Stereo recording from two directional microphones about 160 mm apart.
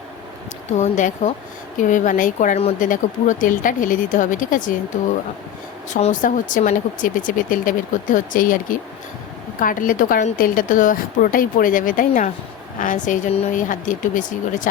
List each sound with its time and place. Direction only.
0.8 s a woman's voice: 50° left (ahead or behind)
5.9 s speech: 50° left (ahead or behind)